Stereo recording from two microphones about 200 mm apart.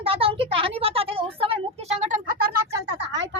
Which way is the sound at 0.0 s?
25° right (ahead or behind).